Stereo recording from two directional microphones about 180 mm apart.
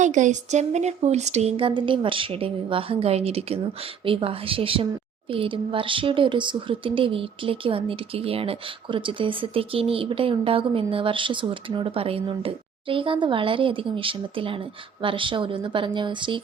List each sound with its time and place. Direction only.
0.0 s speech: 45° right (ahead or behind); by 16.4 s 25° right (ahead or behind)